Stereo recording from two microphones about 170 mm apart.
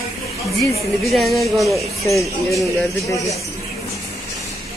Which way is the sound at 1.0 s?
Centre (ahead or behind).